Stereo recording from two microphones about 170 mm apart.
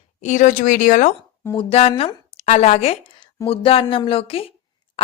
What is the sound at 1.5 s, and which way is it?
A woman's voice, 35° left (ahead or behind).